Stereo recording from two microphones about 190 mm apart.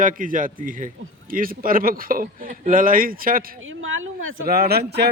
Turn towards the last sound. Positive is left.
turn(degrees=-60)  # may be behind; listen again after turning